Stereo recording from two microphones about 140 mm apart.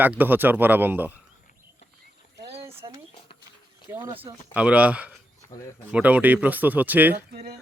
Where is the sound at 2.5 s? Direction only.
45° right (ahead or behind).